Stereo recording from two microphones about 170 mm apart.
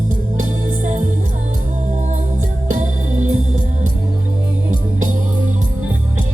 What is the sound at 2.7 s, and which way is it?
Music, 50° right (ahead or behind).